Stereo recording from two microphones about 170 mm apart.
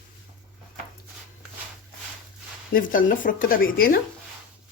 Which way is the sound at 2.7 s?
55° left (ahead or behind).